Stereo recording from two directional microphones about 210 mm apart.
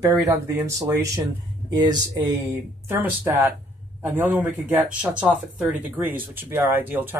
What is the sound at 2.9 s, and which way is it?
Speech, 10° right (ahead or behind).